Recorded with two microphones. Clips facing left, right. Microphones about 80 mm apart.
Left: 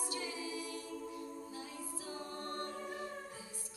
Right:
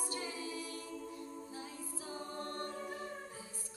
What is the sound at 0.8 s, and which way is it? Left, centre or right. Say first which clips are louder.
Music: left 1 dB; centre.